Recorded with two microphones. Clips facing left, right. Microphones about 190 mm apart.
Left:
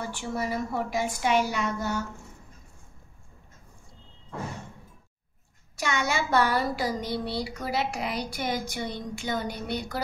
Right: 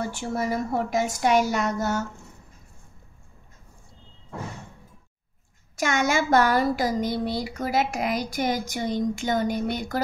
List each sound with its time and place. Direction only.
0.1 s speech: 45° right (ahead or behind)
1.2 s child singing: 40° right (ahead or behind)
5.8 s speech: 45° right (ahead or behind)